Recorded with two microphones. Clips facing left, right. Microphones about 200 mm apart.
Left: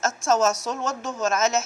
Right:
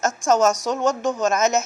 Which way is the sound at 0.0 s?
15° right (ahead or behind).